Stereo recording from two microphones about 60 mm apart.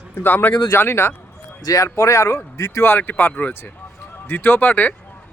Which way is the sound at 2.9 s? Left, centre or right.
Left.